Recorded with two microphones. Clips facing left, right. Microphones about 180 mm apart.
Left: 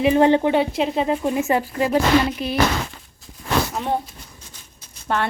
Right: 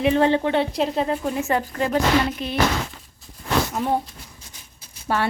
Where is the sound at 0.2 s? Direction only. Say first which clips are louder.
Left 3 dB; 15° left (ahead or behind).